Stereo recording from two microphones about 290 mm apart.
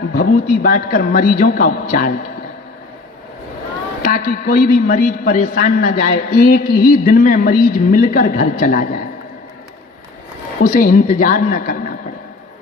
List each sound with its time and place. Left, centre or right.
0.1 s a man's voice: left
4.0 s a man's voice: left
10.6 s a man's voice: left